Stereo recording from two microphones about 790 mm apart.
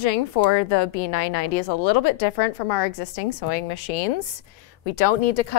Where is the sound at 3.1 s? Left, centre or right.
Left.